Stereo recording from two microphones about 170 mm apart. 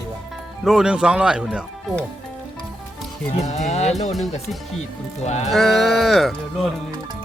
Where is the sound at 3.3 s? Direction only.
40° left (ahead or behind).